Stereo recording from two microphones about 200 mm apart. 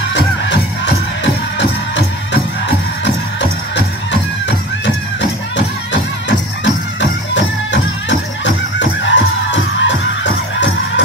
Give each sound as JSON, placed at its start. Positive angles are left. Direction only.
{"t": 0.1, "sound": "music", "side_deg": 60}
{"t": 4.5, "sound": "music", "side_deg": 60}